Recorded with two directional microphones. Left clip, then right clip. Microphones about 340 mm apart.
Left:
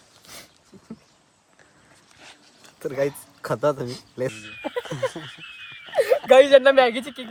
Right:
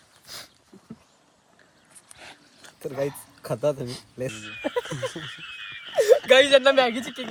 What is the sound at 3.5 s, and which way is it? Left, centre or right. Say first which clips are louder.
Speech: left 3 dB; centre.